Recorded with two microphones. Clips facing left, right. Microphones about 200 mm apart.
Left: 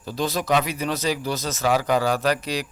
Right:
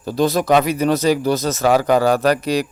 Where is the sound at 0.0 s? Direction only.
55° right (ahead or behind).